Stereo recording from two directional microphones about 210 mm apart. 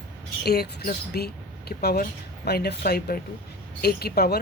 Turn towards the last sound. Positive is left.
turn(degrees=50)  # may be behind; listen again after turning